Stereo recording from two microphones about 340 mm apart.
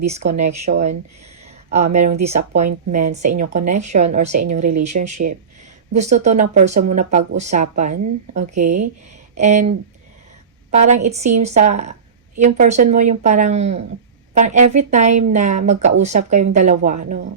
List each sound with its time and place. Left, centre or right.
0.1 s speech: centre